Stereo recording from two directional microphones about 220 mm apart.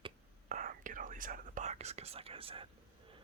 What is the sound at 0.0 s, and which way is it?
Whispering, 35° right (ahead or behind).